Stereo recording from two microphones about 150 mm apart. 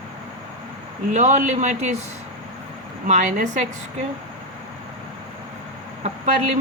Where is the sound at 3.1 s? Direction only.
55° right (ahead or behind).